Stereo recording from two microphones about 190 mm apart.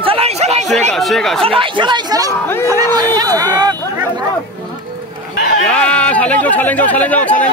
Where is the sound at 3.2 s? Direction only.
20° right (ahead or behind).